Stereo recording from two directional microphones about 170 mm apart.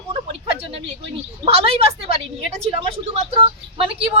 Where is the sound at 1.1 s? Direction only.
35° right (ahead or behind).